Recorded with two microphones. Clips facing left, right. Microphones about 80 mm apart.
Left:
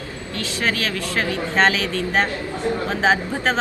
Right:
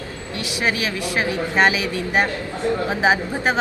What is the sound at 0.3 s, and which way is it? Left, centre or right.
A woman's voice, centre.